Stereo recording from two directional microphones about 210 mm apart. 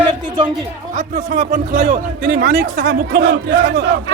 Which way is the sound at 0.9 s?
40° right (ahead or behind).